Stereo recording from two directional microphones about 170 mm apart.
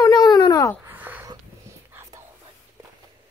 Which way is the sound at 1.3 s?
20° right (ahead or behind).